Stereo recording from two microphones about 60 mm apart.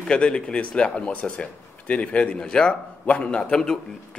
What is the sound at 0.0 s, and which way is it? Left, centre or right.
Speech, centre.